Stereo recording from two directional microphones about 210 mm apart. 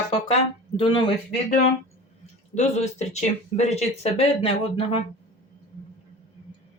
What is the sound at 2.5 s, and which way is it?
Speech, 30° left (ahead or behind).